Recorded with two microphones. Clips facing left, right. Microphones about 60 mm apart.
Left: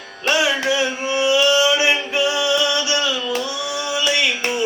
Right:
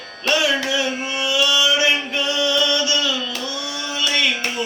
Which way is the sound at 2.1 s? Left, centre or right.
Centre.